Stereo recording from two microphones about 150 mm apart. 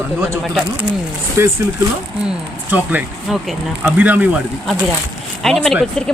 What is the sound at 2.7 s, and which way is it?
Speech, 10° right (ahead or behind).